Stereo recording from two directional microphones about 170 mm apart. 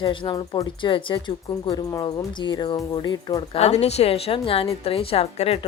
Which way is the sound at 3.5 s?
40° left (ahead or behind).